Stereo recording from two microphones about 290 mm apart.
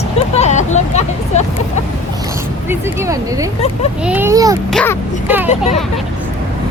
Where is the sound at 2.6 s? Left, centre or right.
Centre.